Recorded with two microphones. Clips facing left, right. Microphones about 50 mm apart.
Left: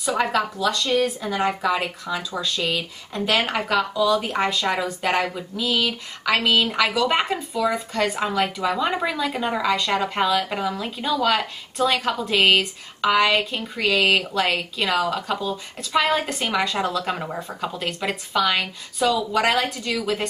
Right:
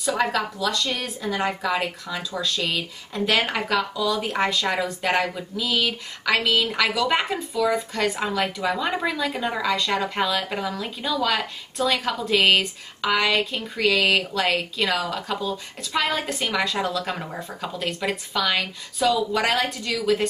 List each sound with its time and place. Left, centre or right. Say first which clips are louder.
0.2 s speech: left 4 dB; centre